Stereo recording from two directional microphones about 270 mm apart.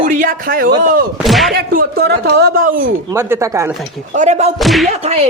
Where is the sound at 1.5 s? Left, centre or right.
Right.